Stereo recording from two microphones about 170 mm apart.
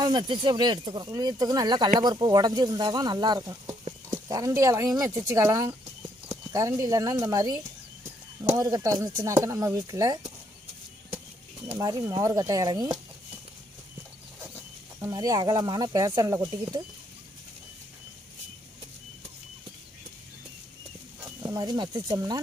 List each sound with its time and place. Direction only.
0.0 s speech: 30° right (ahead or behind)
6.2 s clip-clop: 20° right (ahead or behind)
6.8 s speech: 20° right (ahead or behind)
11.8 s speech: 20° right (ahead or behind)
15.0 s speech: 20° right (ahead or behind)
21.2 s speech: 20° right (ahead or behind)